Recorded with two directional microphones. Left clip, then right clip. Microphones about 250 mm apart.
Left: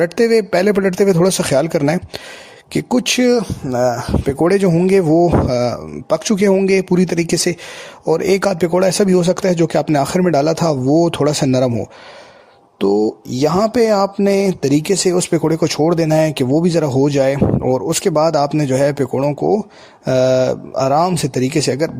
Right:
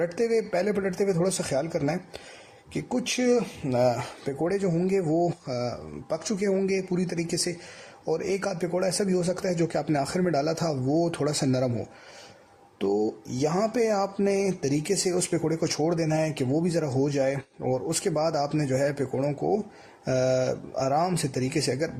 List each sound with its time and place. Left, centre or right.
0.0 s speech: left